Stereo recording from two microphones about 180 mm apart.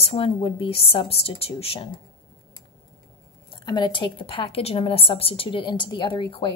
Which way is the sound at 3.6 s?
25° left (ahead or behind).